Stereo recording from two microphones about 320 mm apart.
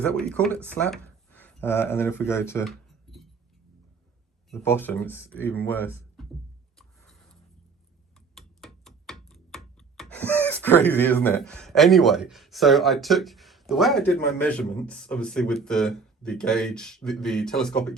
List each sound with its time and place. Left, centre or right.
0.0 s speech: centre
4.5 s speech: centre
6.2 s music: centre
8.4 s rub: centre